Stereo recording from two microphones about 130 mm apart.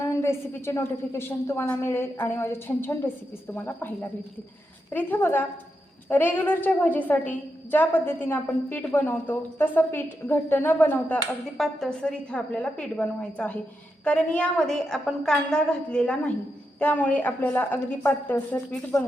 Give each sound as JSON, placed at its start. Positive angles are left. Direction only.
{"t": 0.0, "sound": "a woman's voice", "side_deg": 20}
{"t": 11.5, "sound": "a woman's voice", "side_deg": 0}